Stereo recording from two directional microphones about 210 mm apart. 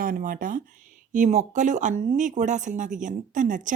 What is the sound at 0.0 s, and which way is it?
Speech, 40° right (ahead or behind).